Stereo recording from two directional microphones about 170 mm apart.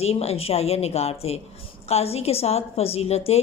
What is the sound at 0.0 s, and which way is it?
A woman's voice, 35° left (ahead or behind).